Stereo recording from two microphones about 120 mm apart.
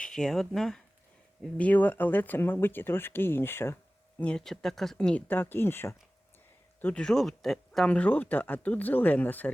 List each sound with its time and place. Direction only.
0.0 s speech: 5° left (ahead or behind)
4.2 s speech: 10° left (ahead or behind)
6.8 s speech: 5° left (ahead or behind)